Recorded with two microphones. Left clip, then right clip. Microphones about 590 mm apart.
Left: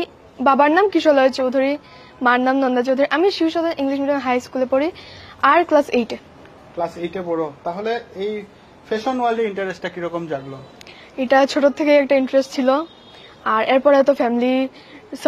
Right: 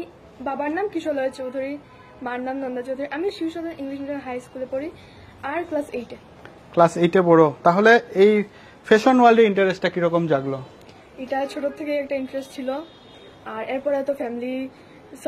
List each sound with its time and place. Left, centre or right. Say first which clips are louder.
0.4 s a woman's voice: left 11 dB; left
6.8 s speech: right 8 dB; right
8.8 s a man's voice: right 6 dB; right
11.2 s a woman's voice: left 11 dB; left